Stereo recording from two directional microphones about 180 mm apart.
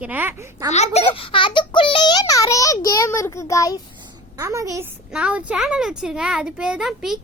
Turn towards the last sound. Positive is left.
turn(degrees=0)  # may be behind; listen again after turning